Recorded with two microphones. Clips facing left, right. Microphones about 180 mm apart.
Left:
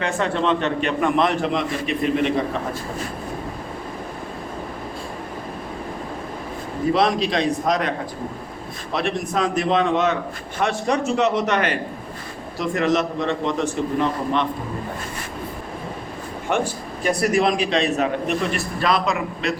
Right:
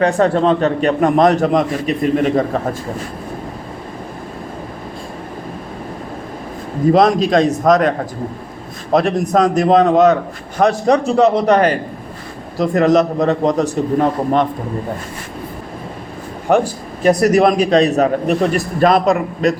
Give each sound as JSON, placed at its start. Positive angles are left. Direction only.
{"t": 0.0, "sound": "a man's voice", "side_deg": -40}
{"t": 6.9, "sound": "a man's voice", "side_deg": -45}
{"t": 16.5, "sound": "a man's voice", "side_deg": -40}